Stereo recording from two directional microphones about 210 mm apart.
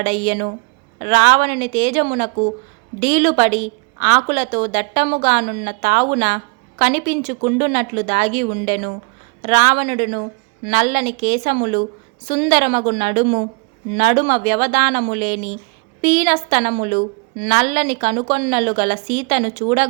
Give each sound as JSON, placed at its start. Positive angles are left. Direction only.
{"t": 0.0, "sound": "a woman's voice", "side_deg": -35}